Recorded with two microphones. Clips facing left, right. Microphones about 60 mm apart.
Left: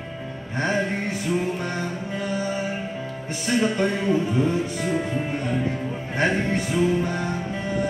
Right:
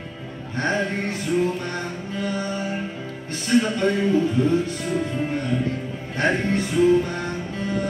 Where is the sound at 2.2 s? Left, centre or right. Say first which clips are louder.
Right 1 dB; centre.